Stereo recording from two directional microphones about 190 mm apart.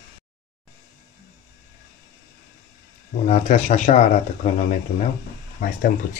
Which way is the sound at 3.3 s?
40° left (ahead or behind).